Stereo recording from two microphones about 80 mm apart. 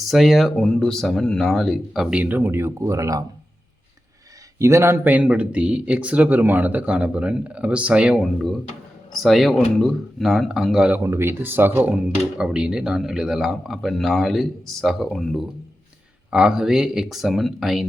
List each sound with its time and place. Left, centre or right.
0.0 s speech: centre
2.1 s speech: centre
2.4 s speech: right
4.5 s a man's voice: right
5.2 s speech: centre
8.2 s speech: centre
11.0 s speech: right
12.0 s speech: centre
16.3 s speech: centre